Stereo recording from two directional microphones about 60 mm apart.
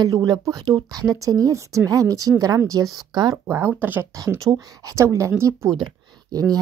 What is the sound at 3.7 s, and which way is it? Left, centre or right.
Speech, right.